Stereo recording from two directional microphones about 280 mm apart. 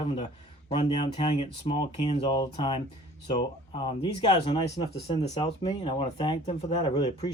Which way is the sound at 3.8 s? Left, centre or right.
Centre.